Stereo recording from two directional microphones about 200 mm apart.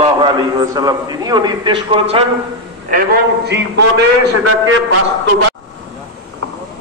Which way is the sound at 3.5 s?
60° right (ahead or behind).